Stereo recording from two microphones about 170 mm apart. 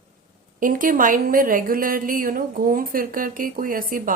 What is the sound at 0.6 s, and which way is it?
Speech, 50° right (ahead or behind).